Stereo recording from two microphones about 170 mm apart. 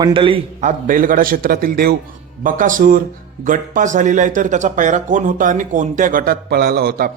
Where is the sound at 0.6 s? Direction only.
50° right (ahead or behind).